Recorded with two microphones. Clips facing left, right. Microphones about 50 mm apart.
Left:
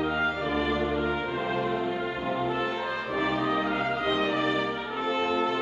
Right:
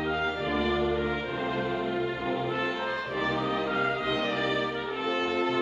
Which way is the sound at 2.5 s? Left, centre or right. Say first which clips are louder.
Left 1 dB; left.